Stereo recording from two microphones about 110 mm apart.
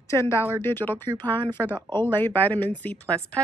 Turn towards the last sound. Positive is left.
turn(degrees=10)  # may be behind; listen again after turning